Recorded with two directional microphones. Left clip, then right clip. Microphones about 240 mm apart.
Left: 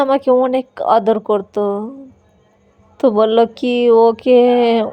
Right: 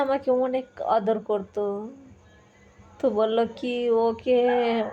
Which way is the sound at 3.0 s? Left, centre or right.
Left.